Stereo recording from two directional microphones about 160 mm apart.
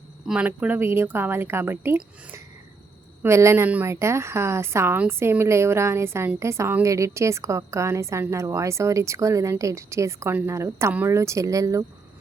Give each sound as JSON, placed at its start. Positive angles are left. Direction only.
{"t": 0.3, "sound": "a woman's voice", "side_deg": -5}